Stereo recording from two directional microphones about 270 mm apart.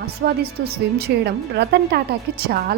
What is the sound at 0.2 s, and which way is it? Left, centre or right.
A woman's voice, right.